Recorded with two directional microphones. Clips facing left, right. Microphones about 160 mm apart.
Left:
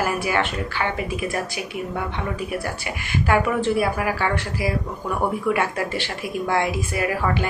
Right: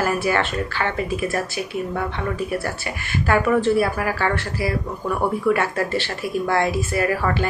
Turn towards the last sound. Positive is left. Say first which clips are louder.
# right 2 dB
turn(degrees=15)  # may be behind; listen again after turning